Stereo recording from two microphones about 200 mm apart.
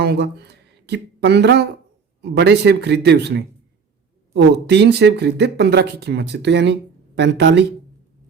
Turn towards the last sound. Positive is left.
turn(degrees=-60)  # may be behind; listen again after turning